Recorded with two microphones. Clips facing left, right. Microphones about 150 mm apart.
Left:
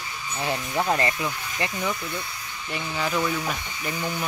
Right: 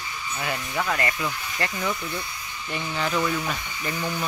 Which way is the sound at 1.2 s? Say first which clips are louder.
Even; 15° left (ahead or behind).